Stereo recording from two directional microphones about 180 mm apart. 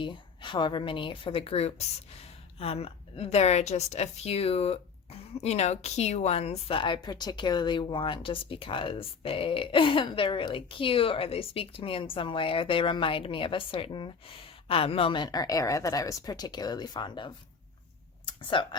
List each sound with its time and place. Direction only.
0.0 s a woman's voice: 25° left (ahead or behind)